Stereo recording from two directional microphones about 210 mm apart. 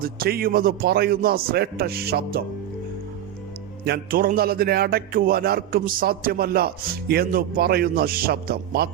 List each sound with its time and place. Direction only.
0.0 s speech: 45° right (ahead or behind)
3.8 s speech: 45° right (ahead or behind)